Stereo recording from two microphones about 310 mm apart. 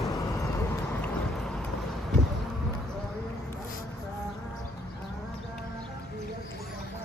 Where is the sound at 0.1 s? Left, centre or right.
Centre.